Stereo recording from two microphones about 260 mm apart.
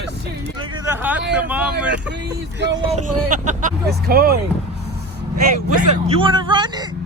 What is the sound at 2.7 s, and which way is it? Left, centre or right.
Speech, right.